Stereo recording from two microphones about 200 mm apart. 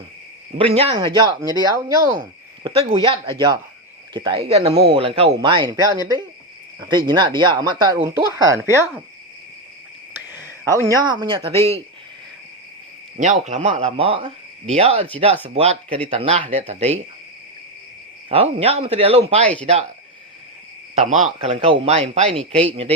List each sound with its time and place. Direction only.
0.6 s speech: 30° right (ahead or behind)
10.9 s speech: 20° right (ahead or behind)
13.1 s speech: 35° right (ahead or behind)
18.3 s speech: 30° right (ahead or behind)
21.0 s speech: 35° right (ahead or behind)